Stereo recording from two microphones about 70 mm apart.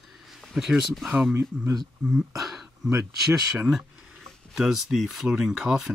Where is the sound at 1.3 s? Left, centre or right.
Right.